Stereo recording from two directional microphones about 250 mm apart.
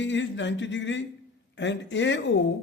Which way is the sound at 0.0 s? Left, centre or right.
Left.